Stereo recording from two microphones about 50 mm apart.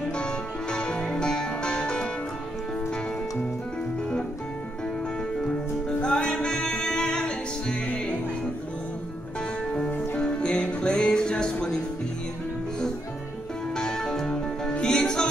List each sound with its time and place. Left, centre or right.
0.2 s music: centre
5.9 s music: centre
10.1 s music: centre
13.7 s music: centre